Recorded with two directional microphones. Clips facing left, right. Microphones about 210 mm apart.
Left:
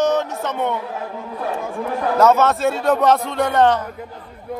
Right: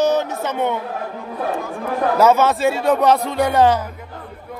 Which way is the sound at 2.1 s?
Centre (ahead or behind).